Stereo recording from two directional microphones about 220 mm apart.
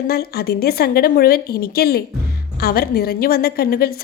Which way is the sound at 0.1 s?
45° left (ahead or behind).